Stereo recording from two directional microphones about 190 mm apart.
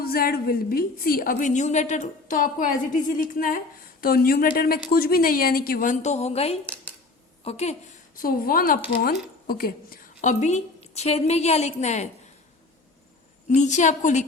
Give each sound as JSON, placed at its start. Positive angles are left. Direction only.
{"t": 0.0, "sound": "a woman's voice", "side_deg": 50}
{"t": 13.5, "sound": "a woman's voice", "side_deg": 40}